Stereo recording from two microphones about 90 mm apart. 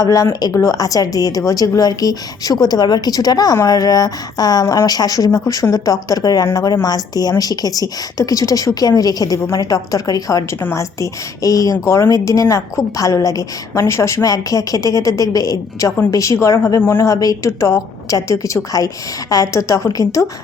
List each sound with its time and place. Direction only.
0.0 s a woman's voice: 40° left (ahead or behind)
4.6 s a woman's voice: 30° left (ahead or behind)
4.9 s a woman's voice: 45° left (ahead or behind)